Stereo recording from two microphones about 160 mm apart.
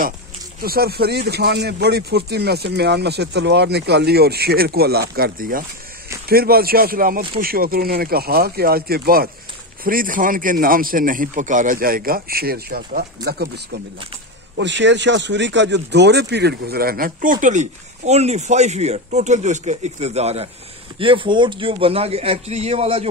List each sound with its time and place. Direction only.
0.6 s speech: 70° right (ahead or behind)
6.2 s speech: 70° right (ahead or behind)
14.6 s a man's voice: 90° right; by 23.0 s 40° right (ahead or behind)